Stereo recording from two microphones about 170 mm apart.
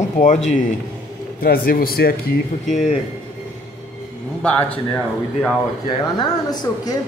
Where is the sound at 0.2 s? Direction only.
45° left (ahead or behind).